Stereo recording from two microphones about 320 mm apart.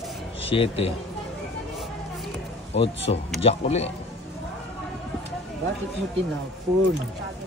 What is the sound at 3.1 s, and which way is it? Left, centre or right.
Speech, centre.